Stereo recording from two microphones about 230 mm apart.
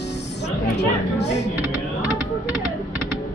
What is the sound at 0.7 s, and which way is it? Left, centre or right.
Speech, left.